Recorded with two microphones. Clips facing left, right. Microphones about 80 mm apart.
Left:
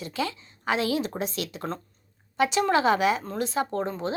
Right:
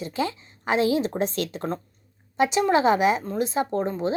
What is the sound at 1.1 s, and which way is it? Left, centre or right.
Speech, right.